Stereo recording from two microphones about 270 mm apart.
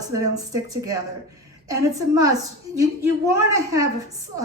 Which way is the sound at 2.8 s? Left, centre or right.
Centre.